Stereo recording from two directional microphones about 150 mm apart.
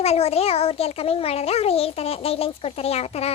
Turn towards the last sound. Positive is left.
turn(degrees=45)  # may be behind; listen again after turning